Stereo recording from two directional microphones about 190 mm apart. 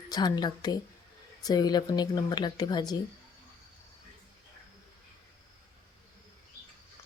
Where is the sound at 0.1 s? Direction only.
20° left (ahead or behind).